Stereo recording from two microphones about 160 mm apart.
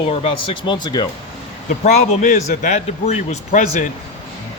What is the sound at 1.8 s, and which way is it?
A man's voice, 45° left (ahead or behind).